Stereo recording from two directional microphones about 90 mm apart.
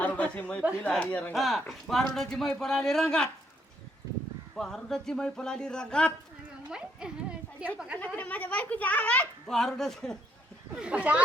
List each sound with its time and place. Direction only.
0.0 s a sound: 20° left (ahead or behind)
0.8 s speech: 15° left (ahead or behind)
1.3 s speech: centre (ahead or behind)
4.5 s speech: 5° left (ahead or behind)
6.7 s a sound: 10° right (ahead or behind)
7.9 s speech: 15° left (ahead or behind)
9.5 s speech: 5° left (ahead or behind)
10.8 s speech: 15° right (ahead or behind)